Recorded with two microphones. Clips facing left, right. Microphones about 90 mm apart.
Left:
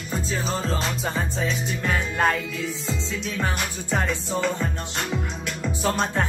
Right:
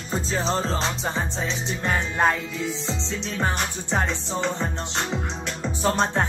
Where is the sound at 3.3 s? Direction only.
30° right (ahead or behind).